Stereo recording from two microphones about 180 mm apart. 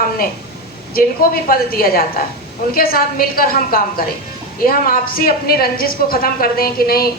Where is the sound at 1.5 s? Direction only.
55° left (ahead or behind).